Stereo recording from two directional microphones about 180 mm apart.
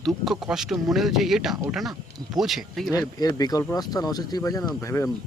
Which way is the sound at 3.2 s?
20° left (ahead or behind).